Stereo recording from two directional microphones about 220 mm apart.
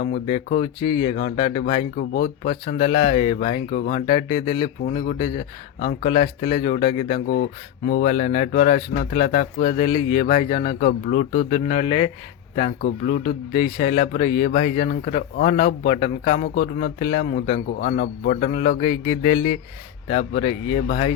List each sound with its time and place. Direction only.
0.0 s speech: 35° left (ahead or behind)
0.8 s speech: 20° left (ahead or behind)
2.0 s speech: 40° left (ahead or behind)
9.8 s speech: 25° left (ahead or behind); by 21.1 s 40° left (ahead or behind)